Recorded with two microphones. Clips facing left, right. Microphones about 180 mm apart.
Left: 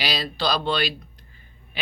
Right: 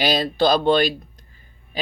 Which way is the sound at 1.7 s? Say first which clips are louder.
Right 7 dB; 40° right (ahead or behind).